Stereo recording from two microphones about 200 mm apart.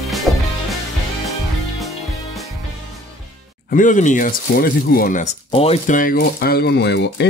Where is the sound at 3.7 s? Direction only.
40° left (ahead or behind).